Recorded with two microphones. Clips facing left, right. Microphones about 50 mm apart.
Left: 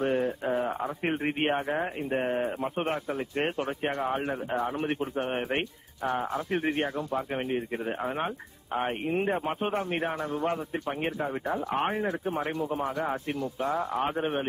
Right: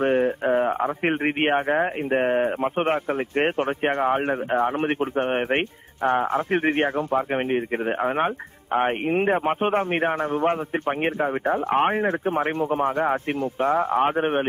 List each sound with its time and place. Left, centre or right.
0.0 s speech: right